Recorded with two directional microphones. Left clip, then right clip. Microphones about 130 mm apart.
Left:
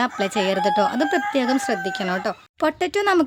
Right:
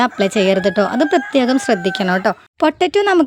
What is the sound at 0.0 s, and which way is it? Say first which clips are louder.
A woman's voice: right 7 dB; 40° right (ahead or behind).